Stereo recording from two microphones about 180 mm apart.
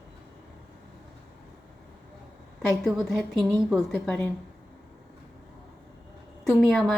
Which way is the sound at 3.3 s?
20° right (ahead or behind).